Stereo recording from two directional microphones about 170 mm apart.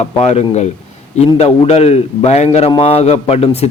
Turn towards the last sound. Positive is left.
turn(degrees=40)  # may be behind; listen again after turning